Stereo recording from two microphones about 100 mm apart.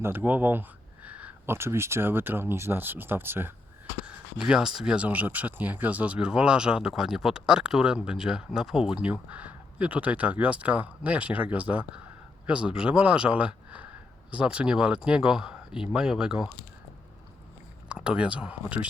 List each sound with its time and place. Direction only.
0.0 s speech: 20° right (ahead or behind)
1.0 s a sound: 15° right (ahead or behind)
1.5 s speech: 25° right (ahead or behind)
4.0 s speech: 10° right (ahead or behind)
17.8 s speech: 10° right (ahead or behind)